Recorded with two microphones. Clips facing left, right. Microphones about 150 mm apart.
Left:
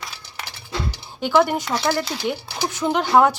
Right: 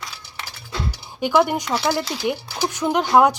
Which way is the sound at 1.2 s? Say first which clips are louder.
Even; 10° right (ahead or behind).